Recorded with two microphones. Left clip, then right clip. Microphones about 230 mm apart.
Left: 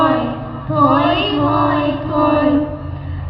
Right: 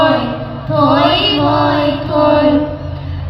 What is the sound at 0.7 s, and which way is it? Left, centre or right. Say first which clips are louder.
Mantra: right 2 dB; right.